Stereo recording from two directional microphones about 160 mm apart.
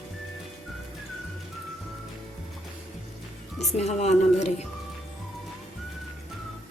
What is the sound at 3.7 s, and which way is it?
Speech, 45° left (ahead or behind).